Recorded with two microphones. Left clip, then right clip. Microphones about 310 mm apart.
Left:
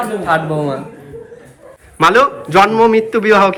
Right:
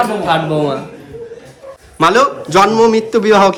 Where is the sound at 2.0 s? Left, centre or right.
Centre.